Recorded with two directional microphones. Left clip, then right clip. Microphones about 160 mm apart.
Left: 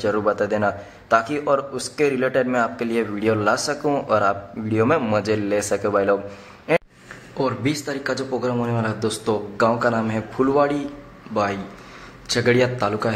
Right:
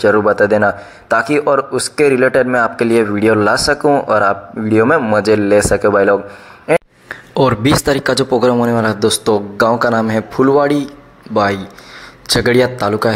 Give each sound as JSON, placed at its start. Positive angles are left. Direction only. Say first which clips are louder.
{"t": 0.0, "sound": "a man's voice", "louder": "right 10 dB", "side_deg": -20}
{"t": 7.3, "sound": "speech", "louder": "right 11 dB", "side_deg": -50}